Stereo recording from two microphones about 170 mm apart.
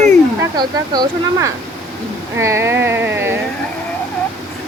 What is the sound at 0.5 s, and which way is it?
Speech, 25° right (ahead or behind).